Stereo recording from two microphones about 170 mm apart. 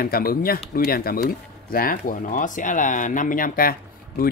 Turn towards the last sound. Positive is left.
turn(degrees=60)  # may be behind; listen again after turning